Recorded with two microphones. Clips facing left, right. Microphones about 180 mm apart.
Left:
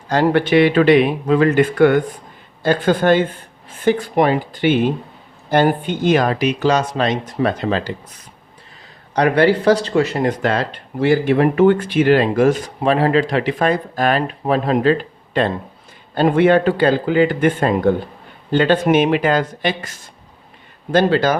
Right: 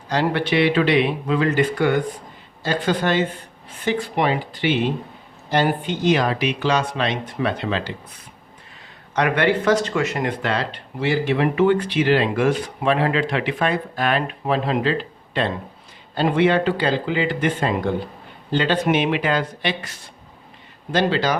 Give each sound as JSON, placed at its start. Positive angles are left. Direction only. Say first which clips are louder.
{"t": 0.1, "sound": "speech", "louder": "left 6 dB", "side_deg": 45}
{"t": 20.9, "sound": "speech", "louder": "left 5 dB", "side_deg": 50}